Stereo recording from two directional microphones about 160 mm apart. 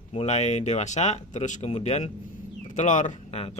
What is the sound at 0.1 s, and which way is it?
A man's voice, 40° left (ahead or behind).